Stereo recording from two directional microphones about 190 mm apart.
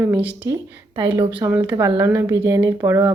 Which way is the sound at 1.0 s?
25° right (ahead or behind).